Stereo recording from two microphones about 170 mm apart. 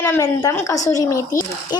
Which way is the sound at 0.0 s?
15° left (ahead or behind).